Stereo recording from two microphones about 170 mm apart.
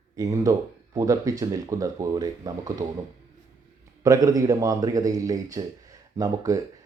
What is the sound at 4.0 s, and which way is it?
Speech, 20° right (ahead or behind).